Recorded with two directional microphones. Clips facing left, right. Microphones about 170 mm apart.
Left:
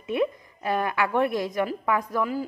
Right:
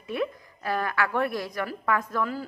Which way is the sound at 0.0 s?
20° left (ahead or behind).